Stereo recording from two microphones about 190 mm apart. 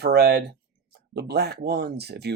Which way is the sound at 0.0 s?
55° right (ahead or behind).